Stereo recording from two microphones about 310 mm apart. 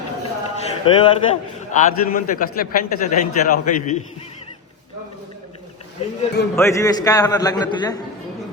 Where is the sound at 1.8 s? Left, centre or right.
Left.